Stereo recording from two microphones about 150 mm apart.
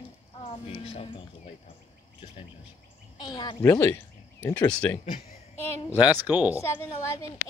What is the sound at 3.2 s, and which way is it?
Speech, 30° left (ahead or behind).